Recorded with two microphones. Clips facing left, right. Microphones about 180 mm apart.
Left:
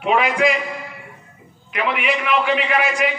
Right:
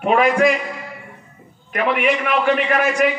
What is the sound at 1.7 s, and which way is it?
A man's voice, 45° right (ahead or behind).